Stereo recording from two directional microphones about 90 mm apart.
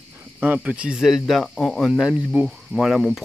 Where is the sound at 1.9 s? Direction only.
10° right (ahead or behind).